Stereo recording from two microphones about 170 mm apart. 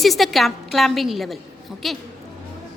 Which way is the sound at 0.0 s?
Centre (ahead or behind).